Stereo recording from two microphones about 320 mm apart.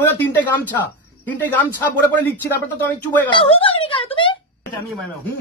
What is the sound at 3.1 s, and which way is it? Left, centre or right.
Speech, centre.